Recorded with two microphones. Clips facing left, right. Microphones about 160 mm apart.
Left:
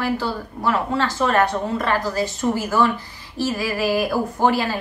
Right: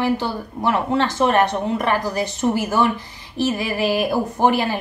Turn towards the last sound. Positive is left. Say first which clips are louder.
# right 1 dB
turn(degrees=-20)  # may be behind; listen again after turning